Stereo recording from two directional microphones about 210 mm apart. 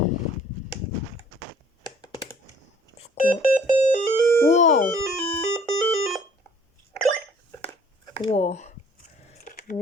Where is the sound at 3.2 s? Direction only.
40° left (ahead or behind).